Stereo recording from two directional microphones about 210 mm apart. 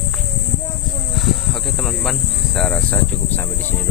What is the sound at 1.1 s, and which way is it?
Cricket, centre (ahead or behind).